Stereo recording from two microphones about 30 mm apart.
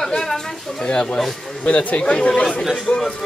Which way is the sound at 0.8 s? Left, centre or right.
Left.